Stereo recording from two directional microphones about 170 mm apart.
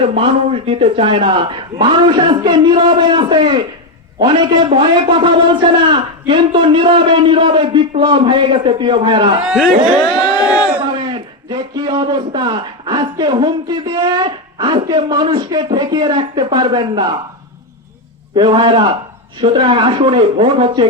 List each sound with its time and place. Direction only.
0.2 s a man's voice: 35° right (ahead or behind)
9.4 s speech: centre (ahead or behind)
10.4 s crowd: 5° right (ahead or behind)
10.8 s a man's voice: 25° right (ahead or behind)
18.3 s a man's voice: 25° right (ahead or behind)